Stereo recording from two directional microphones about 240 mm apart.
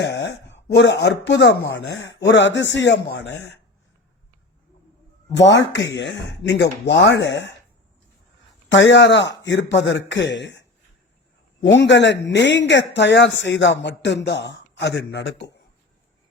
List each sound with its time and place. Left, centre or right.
0.0 s speech: left
5.3 s speech: left
8.7 s speech: left
11.6 s speech: left